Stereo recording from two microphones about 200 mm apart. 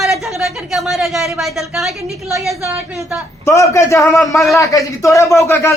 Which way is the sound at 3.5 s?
15° left (ahead or behind).